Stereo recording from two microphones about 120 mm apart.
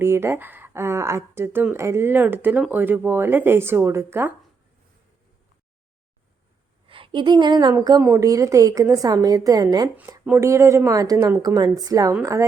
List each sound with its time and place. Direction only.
0.0 s speech: 20° right (ahead or behind)
6.8 s a woman's voice: 50° right (ahead or behind)
10.2 s speech: 25° right (ahead or behind)